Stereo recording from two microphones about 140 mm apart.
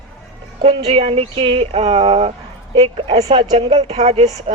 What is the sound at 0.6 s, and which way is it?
A woman's voice, 40° right (ahead or behind).